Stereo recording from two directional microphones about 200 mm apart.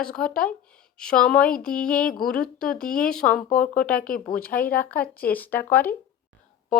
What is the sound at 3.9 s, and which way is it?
Speech, 45° left (ahead or behind).